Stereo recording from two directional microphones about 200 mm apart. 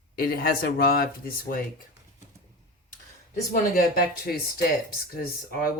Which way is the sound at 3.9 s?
50° left (ahead or behind).